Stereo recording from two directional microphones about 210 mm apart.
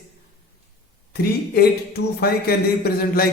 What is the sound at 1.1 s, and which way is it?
A man's voice, 50° left (ahead or behind).